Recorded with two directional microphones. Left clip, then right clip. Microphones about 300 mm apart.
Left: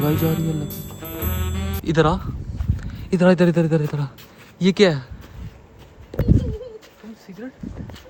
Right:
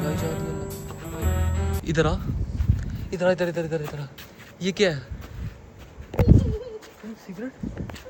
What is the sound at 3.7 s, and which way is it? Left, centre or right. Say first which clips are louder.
Speech: left 6 dB; centre.